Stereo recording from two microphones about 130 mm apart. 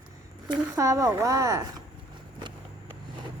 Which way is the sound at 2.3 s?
35° right (ahead or behind).